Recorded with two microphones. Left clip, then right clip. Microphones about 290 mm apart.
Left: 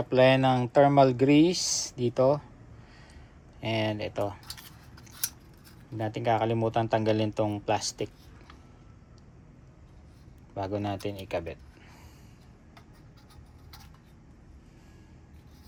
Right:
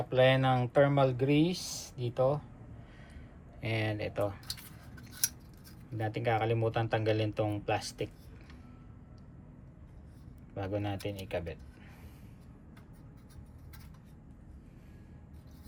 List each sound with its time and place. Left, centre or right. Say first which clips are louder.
0.1 s speech: left 5 dB; centre
3.6 s speech: left 5 dB; centre
6.0 s speech: left 5 dB; centre
10.5 s speech: left 4 dB; centre